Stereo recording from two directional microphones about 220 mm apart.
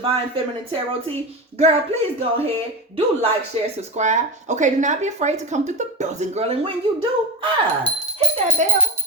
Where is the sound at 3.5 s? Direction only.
25° right (ahead or behind).